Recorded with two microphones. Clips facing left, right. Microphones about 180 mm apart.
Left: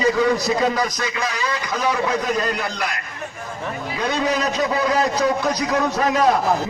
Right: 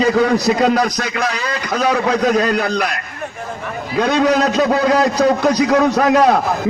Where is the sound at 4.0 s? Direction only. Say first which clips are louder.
Right 8 dB; 70° right (ahead or behind).